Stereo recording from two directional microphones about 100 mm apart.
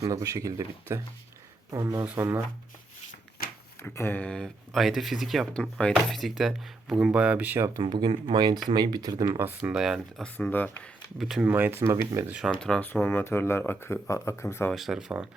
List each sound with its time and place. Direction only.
0.0 s speech: 35° right (ahead or behind)
3.8 s speech: 20° left (ahead or behind); by 7.7 s 20° right (ahead or behind)
7.8 s speech: 50° right (ahead or behind)
9.4 s speech: 20° right (ahead or behind)
10.2 s speech: 15° left (ahead or behind)
11.2 s speech: 5° right (ahead or behind)
11.4 s speech: 20° right (ahead or behind)
12.4 s speech: 5° left (ahead or behind)
12.8 s speech: 20° left (ahead or behind)
14.7 s speech: 5° right (ahead or behind)